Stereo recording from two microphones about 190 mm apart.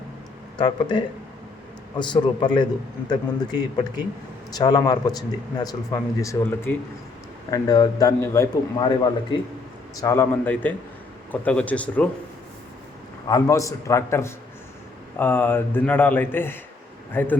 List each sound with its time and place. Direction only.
0.6 s speech: 25° left (ahead or behind)
10.0 s speech: 15° left (ahead or behind)
13.2 s speech: 20° left (ahead or behind)